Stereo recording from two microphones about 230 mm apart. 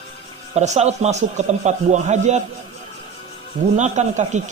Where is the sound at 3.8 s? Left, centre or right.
Right.